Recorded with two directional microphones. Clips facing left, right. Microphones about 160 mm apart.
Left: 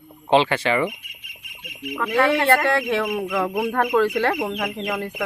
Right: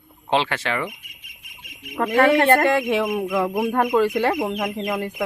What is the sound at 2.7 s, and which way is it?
Speech, 15° right (ahead or behind).